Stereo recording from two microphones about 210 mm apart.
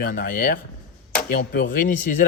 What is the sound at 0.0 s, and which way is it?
A man's voice, 40° left (ahead or behind).